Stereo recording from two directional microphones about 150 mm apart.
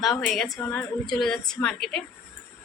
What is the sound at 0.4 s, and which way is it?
Speech, 25° left (ahead or behind).